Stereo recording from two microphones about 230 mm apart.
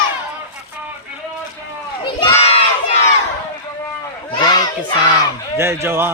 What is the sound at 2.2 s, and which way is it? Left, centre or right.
Crowd, left.